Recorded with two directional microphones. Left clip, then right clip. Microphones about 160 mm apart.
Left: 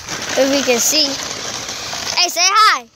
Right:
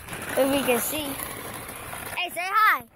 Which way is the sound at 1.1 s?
45° right (ahead or behind).